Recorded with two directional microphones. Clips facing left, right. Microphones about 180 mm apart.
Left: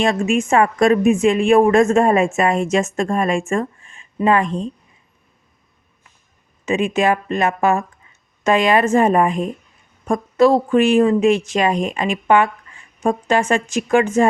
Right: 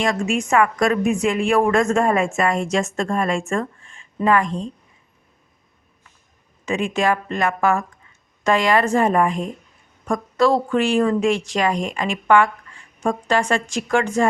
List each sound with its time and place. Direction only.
0.0 s speech: 25° left (ahead or behind)
6.7 s speech: 20° left (ahead or behind)